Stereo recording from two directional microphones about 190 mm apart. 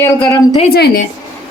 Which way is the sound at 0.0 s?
15° left (ahead or behind).